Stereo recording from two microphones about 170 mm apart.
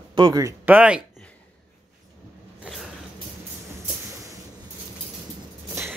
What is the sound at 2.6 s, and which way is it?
Zipper, centre (ahead or behind).